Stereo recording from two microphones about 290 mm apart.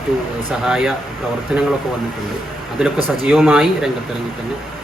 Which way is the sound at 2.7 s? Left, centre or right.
Centre.